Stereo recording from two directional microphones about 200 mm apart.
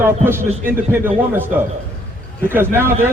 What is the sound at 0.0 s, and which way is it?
A man's voice, 10° right (ahead or behind).